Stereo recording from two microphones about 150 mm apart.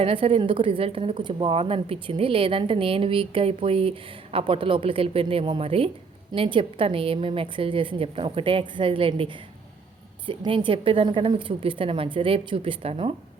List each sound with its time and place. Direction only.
0.0 s a woman's voice: 35° right (ahead or behind)